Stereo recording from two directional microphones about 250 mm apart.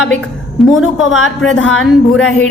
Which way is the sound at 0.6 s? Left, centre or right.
Centre.